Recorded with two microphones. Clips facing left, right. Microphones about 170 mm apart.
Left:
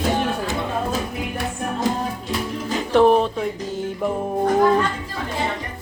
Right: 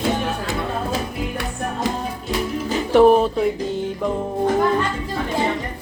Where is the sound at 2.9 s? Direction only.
5° right (ahead or behind).